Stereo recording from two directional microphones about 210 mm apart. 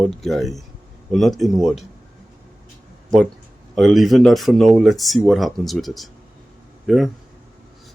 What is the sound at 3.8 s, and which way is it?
Speech, centre (ahead or behind).